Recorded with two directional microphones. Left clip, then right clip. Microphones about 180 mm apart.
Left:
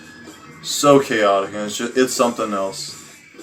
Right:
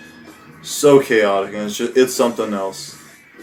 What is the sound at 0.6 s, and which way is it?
Speech, 10° right (ahead or behind).